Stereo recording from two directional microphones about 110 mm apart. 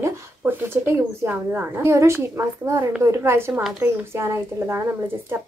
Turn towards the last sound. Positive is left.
turn(degrees=-20)  # may be behind; listen again after turning